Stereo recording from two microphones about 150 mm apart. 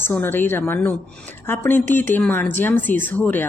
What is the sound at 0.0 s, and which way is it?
A woman's voice, 15° left (ahead or behind).